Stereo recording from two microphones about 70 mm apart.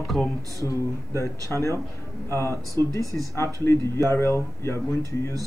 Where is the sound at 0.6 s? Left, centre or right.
Left.